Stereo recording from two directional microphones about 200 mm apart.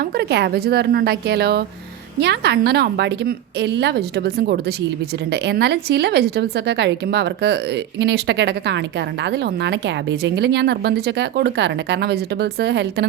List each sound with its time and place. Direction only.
0.0 s a woman's voice: 55° right (ahead or behind)